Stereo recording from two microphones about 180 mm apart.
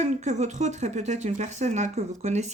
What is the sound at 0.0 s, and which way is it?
Speech, 40° right (ahead or behind).